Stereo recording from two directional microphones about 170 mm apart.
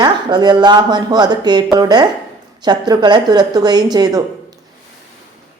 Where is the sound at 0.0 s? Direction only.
25° right (ahead or behind).